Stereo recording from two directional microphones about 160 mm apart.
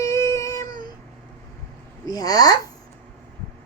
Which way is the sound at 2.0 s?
25° left (ahead or behind).